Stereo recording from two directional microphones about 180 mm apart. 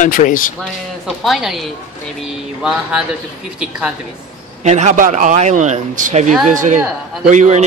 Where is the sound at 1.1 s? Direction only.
Centre (ahead or behind).